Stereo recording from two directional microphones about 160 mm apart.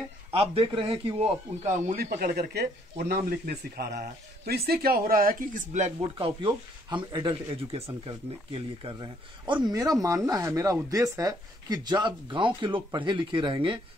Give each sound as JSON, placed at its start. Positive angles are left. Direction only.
{"t": 0.3, "sound": "speech", "side_deg": -35}
{"t": 2.1, "sound": "speech", "side_deg": -65}
{"t": 6.0, "sound": "a man's voice", "side_deg": -30}